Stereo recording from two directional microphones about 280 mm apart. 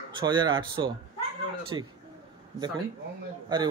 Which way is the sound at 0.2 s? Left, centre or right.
Centre.